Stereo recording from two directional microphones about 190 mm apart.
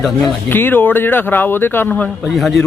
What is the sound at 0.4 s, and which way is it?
A man's voice, 10° left (ahead or behind).